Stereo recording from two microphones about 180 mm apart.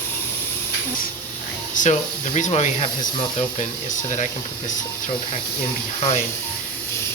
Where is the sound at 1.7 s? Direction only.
40° left (ahead or behind).